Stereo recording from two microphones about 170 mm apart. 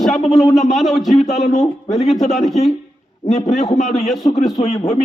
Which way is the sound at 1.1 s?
40° left (ahead or behind).